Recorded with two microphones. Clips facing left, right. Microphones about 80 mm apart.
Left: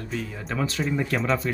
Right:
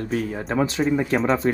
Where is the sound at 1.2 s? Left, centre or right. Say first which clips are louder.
Right 4 dB; right.